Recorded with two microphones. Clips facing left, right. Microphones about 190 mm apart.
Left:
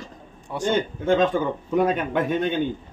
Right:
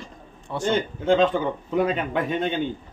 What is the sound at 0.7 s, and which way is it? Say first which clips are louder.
A man's voice: even; 50° left (ahead or behind).